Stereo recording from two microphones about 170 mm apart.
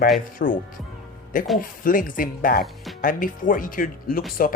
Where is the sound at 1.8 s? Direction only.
55° left (ahead or behind).